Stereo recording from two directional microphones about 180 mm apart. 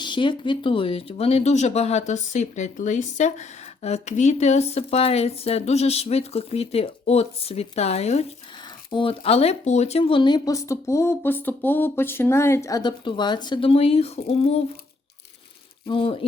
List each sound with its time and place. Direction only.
0.0 s speech: 25° left (ahead or behind)
15.9 s speech: 30° left (ahead or behind)